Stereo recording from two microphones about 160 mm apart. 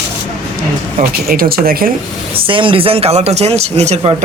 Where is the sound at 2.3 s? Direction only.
35° right (ahead or behind).